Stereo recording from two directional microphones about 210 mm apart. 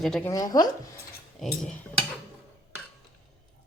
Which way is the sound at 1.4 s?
Centre (ahead or behind).